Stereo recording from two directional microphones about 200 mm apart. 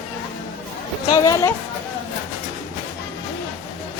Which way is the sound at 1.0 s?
20° left (ahead or behind).